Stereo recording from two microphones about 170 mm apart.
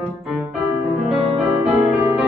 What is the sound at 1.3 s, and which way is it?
Music, centre (ahead or behind).